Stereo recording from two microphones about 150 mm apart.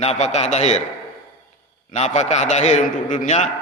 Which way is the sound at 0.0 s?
50° left (ahead or behind).